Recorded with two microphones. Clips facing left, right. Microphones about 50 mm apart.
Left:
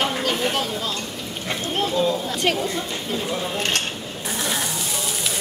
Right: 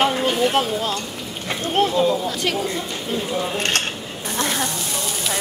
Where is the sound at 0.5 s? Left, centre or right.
Right.